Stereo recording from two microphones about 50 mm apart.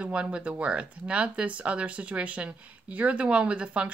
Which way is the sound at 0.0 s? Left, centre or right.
Right.